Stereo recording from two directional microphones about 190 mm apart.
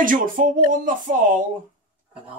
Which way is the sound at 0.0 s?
45° right (ahead or behind).